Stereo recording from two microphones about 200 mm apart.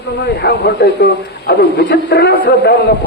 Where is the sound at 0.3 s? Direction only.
55° left (ahead or behind).